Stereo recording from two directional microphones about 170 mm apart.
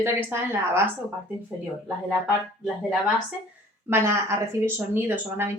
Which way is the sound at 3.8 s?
15° right (ahead or behind).